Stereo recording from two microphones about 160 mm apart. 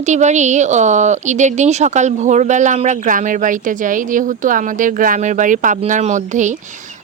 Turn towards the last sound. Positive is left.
turn(degrees=-50)  # may be behind; listen again after turning